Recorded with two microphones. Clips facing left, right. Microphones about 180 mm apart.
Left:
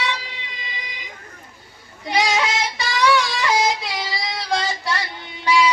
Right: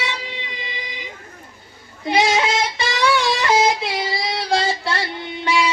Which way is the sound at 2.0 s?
25° right (ahead or behind).